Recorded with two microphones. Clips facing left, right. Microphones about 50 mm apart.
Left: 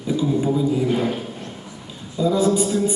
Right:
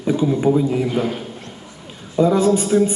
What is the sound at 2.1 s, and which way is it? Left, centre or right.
Speech, right.